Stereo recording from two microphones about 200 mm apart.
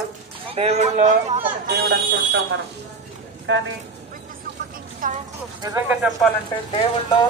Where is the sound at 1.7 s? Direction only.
60° right (ahead or behind).